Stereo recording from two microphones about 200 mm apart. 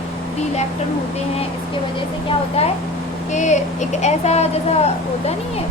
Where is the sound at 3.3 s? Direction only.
35° left (ahead or behind).